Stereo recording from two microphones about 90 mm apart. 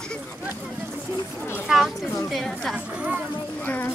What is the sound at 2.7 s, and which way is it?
Chatter, 10° right (ahead or behind).